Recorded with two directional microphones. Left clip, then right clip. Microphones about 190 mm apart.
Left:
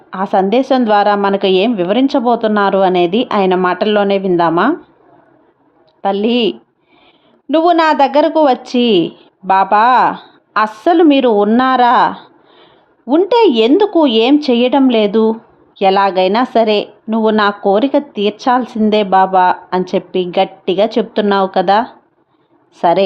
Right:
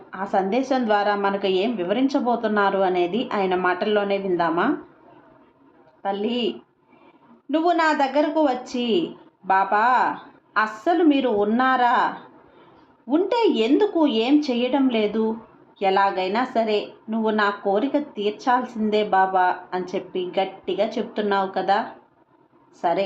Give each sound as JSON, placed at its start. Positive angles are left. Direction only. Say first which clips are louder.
{"t": 0.1, "sound": "a woman's voice", "louder": "left 10 dB", "side_deg": 45}
{"t": 6.0, "sound": "a woman's voice", "louder": "left 11 dB", "side_deg": 45}
{"t": 7.5, "sound": "a woman's voice", "louder": "left 10 dB", "side_deg": 45}